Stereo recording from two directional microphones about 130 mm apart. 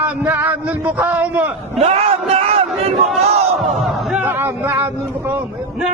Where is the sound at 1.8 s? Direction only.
50° right (ahead or behind).